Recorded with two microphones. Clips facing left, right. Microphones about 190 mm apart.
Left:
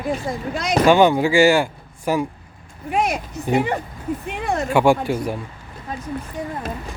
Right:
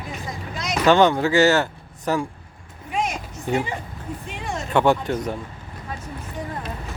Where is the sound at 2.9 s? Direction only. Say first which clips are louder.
Left 5 dB; 60° left (ahead or behind).